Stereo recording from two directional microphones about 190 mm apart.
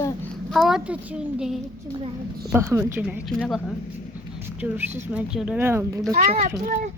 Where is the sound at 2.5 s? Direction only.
15° right (ahead or behind).